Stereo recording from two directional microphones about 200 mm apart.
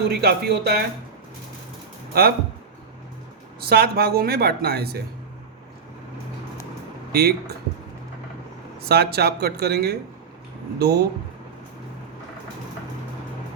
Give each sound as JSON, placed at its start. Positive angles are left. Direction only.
{"t": 0.1, "sound": "speech", "side_deg": -55}
{"t": 2.1, "sound": "speech", "side_deg": -50}
{"t": 3.6, "sound": "speech", "side_deg": -50}
{"t": 7.1, "sound": "speech", "side_deg": -50}
{"t": 8.9, "sound": "speech", "side_deg": -55}